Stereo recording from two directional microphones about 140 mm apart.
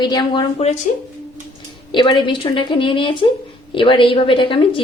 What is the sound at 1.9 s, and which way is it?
A woman's voice, 35° left (ahead or behind).